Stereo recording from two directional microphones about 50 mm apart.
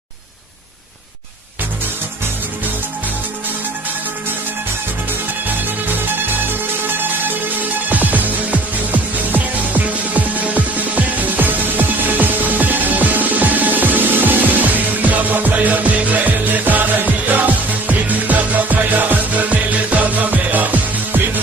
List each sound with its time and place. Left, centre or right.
7.9 s music: right